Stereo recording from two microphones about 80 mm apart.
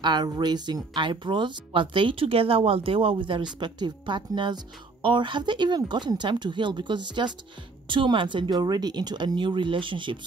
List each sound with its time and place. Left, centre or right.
0.0 s speech: right
0.9 s speech: right
3.5 s speech: right
5.0 s speech: right
7.9 s speech: right